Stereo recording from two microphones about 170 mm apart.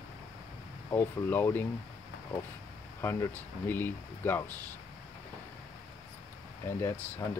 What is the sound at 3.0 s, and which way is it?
Speech, 15° left (ahead or behind).